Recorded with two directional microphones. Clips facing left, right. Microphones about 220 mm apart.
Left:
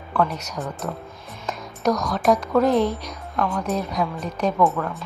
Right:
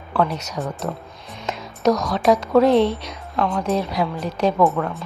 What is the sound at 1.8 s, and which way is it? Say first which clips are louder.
A woman's voice: right 3 dB; 25° right (ahead or behind).